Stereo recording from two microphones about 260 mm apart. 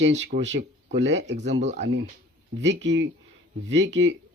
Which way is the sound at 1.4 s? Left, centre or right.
Right.